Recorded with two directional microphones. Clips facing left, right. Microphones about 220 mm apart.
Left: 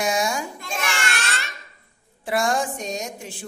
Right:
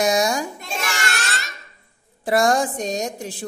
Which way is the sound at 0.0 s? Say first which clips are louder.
Right 4 dB; 40° right (ahead or behind).